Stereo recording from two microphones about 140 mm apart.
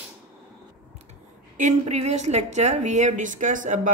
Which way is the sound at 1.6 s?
55° right (ahead or behind).